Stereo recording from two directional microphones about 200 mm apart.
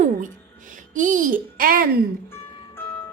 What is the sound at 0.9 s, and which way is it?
Music, 40° right (ahead or behind).